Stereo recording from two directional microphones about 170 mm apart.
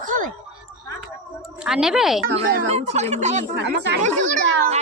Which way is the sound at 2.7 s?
40° right (ahead or behind).